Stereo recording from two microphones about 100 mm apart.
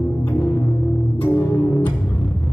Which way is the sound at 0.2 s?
15° left (ahead or behind).